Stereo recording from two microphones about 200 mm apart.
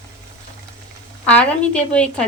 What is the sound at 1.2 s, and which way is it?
A woman's voice, 5° left (ahead or behind).